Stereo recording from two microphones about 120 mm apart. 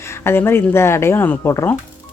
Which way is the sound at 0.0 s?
20° left (ahead or behind).